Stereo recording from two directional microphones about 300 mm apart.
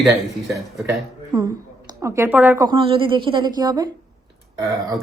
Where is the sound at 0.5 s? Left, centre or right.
Centre.